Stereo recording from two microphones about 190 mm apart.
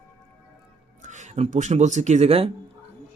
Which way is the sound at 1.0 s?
40° right (ahead or behind).